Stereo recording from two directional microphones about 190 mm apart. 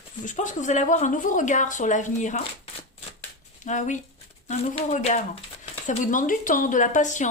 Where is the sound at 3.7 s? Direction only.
40° left (ahead or behind).